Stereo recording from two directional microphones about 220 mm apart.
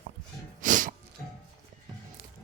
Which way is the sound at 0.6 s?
35° right (ahead or behind).